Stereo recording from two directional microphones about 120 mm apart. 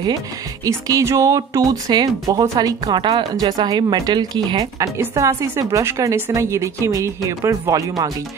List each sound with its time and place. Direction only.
0.7 s a woman's voice: 25° right (ahead or behind)